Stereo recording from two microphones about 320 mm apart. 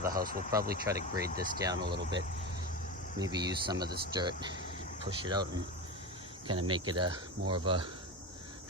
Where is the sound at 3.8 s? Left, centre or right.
Right.